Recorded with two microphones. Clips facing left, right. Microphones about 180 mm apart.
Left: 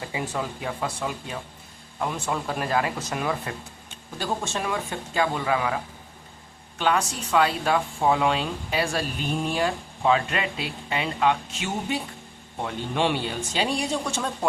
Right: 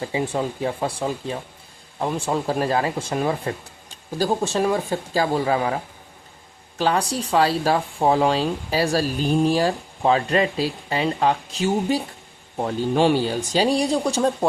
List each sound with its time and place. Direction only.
0.1 s speech: 30° right (ahead or behind)